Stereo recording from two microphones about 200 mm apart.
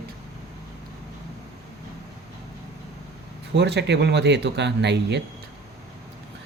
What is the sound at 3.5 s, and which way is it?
Speech, 60° right (ahead or behind).